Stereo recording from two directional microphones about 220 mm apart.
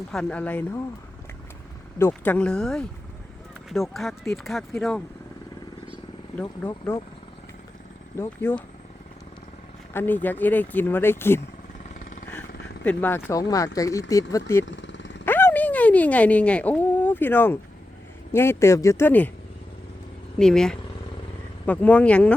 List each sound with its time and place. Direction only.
0.1 s speech: 5° left (ahead or behind)
2.0 s speech: 10° left (ahead or behind)
6.3 s speech: 10° left (ahead or behind)
8.2 s speech: 10° left (ahead or behind)
9.9 s speech: 10° left (ahead or behind)
12.3 s a sound: 5° left (ahead or behind)
13.7 s speech: 15° left (ahead or behind)
14.6 s vehicle: 55° left (ahead or behind)
15.2 s a sound: 10° left (ahead or behind)
18.3 s speech: 10° left (ahead or behind)
20.4 s speech: 5° left (ahead or behind)